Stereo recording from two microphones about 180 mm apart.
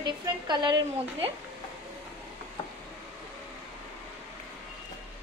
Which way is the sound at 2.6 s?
30° left (ahead or behind).